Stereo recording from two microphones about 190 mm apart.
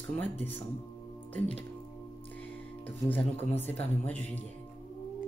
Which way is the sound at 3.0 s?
10° left (ahead or behind).